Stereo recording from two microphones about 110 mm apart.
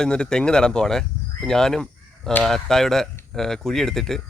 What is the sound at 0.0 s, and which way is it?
Speech, 5° left (ahead or behind).